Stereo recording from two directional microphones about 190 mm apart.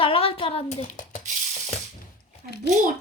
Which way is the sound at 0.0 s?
30° left (ahead or behind).